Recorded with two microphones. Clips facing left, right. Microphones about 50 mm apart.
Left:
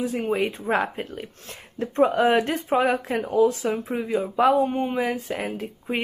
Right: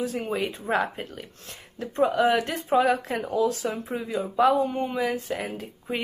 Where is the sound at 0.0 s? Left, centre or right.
Left.